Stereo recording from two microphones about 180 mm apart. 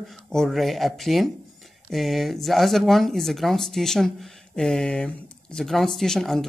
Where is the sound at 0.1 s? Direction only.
Centre (ahead or behind).